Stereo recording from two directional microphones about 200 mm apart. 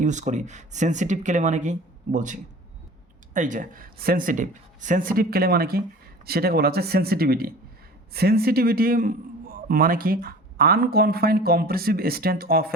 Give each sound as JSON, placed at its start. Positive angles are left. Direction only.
{"t": 0.0, "sound": "a man's voice", "side_deg": -35}